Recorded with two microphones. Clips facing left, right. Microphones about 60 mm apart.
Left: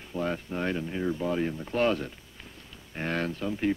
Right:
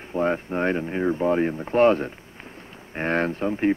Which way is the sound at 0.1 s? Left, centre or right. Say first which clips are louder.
Right 7 dB; right.